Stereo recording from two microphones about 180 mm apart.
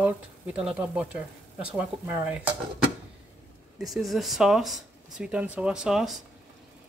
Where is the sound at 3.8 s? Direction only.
Centre (ahead or behind).